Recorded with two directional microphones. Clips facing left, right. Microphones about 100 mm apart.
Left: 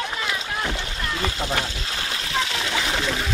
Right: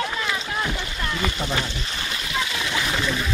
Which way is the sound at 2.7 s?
35° left (ahead or behind).